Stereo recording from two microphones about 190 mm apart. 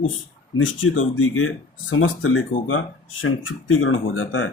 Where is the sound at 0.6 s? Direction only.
90° left.